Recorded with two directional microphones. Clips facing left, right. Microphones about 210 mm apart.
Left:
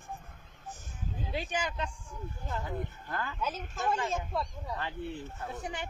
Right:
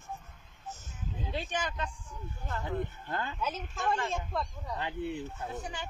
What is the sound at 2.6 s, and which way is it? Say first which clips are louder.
Speech: right 3 dB; 25° right (ahead or behind).